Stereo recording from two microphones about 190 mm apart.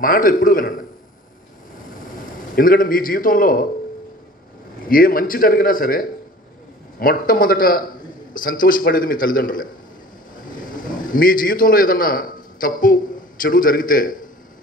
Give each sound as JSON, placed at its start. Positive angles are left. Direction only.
{"t": 0.0, "sound": "a man's voice", "side_deg": 50}
{"t": 2.5, "sound": "a man's voice", "side_deg": 50}
{"t": 4.8, "sound": "a man's voice", "side_deg": 50}